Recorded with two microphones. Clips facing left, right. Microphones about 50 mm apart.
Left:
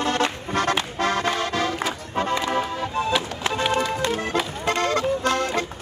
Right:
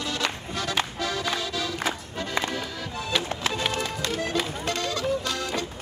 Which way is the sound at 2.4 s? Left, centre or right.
Left.